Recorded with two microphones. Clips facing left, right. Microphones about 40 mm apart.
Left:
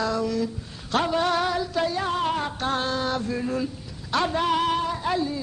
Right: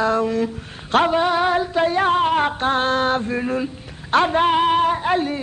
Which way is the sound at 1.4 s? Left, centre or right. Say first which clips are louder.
Right 6 dB; right.